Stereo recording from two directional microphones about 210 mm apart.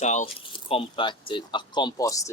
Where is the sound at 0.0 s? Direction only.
35° left (ahead or behind).